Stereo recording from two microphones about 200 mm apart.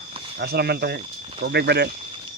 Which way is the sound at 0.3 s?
55° right (ahead or behind).